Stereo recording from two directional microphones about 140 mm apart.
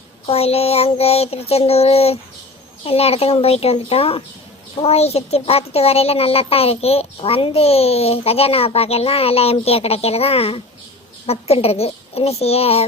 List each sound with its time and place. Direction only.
0.3 s a child's voice: 45° left (ahead or behind)